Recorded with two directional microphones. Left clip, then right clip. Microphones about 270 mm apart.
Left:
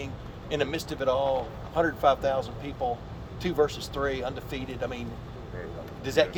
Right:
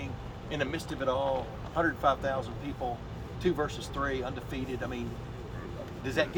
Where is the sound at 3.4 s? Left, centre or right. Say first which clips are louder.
Left 5 dB; left.